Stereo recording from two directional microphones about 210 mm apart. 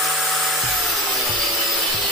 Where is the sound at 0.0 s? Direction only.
Centre (ahead or behind).